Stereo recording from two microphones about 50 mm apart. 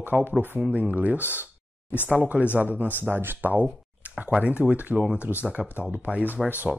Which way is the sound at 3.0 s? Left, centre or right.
Right.